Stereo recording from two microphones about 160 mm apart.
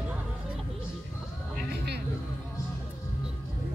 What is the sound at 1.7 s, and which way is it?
Music, 90° right.